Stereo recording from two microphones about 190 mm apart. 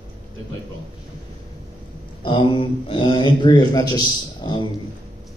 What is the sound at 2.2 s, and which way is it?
A man's voice, 25° left (ahead or behind).